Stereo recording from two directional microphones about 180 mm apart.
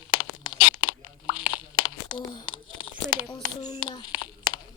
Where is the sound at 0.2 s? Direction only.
25° left (ahead or behind).